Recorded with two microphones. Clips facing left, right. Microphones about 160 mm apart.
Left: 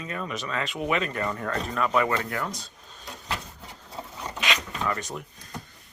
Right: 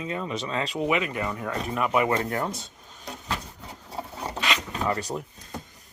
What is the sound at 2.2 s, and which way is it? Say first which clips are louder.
Speech: right 3 dB; 30° right (ahead or behind).